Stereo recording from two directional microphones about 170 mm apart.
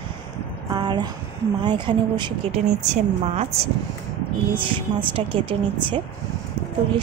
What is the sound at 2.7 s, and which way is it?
A woman's voice, 40° right (ahead or behind).